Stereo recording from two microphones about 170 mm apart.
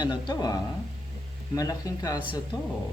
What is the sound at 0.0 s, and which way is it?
Speech, 25° left (ahead or behind).